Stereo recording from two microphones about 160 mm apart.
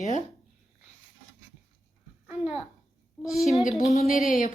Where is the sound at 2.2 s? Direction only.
5° right (ahead or behind).